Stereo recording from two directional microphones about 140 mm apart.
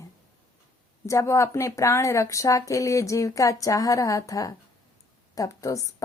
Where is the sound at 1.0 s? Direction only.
20° left (ahead or behind).